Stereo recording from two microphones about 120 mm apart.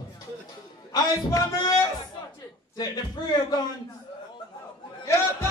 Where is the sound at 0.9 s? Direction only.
30° left (ahead or behind).